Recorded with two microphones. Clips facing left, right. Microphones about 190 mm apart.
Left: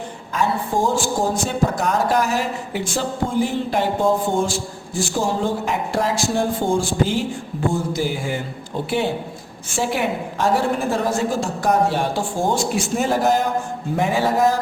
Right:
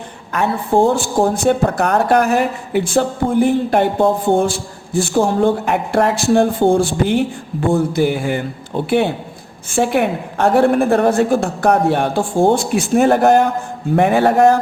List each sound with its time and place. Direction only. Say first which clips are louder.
0.3 s a man's voice: right 6 dB; 60° right (ahead or behind)
9.7 s a man's voice: right 6 dB; 60° right (ahead or behind)